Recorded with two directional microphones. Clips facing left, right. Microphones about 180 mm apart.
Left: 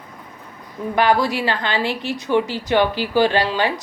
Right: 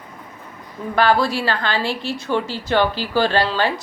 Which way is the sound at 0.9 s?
15° left (ahead or behind).